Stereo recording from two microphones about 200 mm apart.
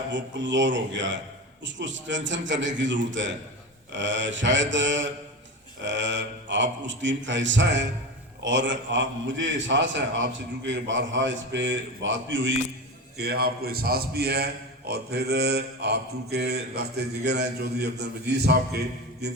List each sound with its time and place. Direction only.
0.1 s a man's voice: 65° right (ahead or behind)
13.1 s a man's voice: 50° right (ahead or behind)